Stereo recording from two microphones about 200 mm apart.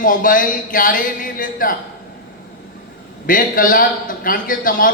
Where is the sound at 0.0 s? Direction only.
45° left (ahead or behind).